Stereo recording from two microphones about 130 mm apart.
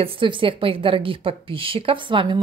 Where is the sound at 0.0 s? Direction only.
40° right (ahead or behind).